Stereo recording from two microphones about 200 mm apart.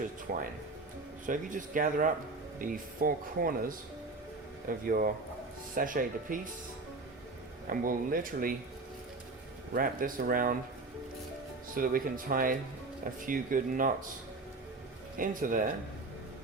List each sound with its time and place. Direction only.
0.3 s speech: 45° right (ahead or behind)
7.7 s speech: 45° right (ahead or behind)
9.7 s speech: 45° right (ahead or behind)
11.7 s speech: 45° right (ahead or behind)
15.2 s speech: 45° right (ahead or behind)